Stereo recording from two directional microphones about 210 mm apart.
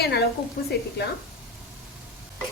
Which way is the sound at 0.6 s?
40° left (ahead or behind).